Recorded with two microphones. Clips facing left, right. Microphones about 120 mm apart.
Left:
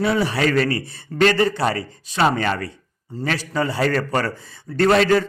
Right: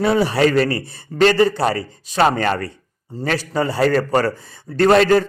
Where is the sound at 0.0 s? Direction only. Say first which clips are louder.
Right 4 dB; 40° right (ahead or behind).